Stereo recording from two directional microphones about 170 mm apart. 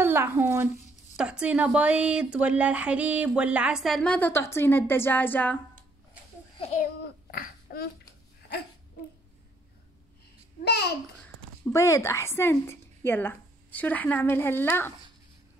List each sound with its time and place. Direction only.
0.0 s speech: 15° right (ahead or behind); by 5.6 s 10° left (ahead or behind)
7.2 s a sound: 60° left (ahead or behind)
10.7 s a child's voice: 75° left (ahead or behind)
11.6 s a woman's voice: 15° left (ahead or behind)